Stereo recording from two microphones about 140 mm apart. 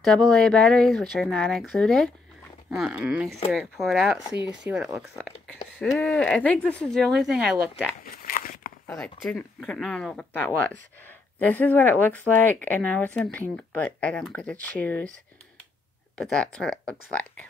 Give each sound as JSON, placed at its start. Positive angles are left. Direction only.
{"t": 0.0, "sound": "speech", "side_deg": 0}
{"t": 5.2, "sound": "speech", "side_deg": 5}
{"t": 8.0, "sound": "a sound", "side_deg": 90}
{"t": 8.9, "sound": "speech", "side_deg": 5}
{"t": 10.3, "sound": "speech", "side_deg": 10}
{"t": 16.2, "sound": "speech", "side_deg": 5}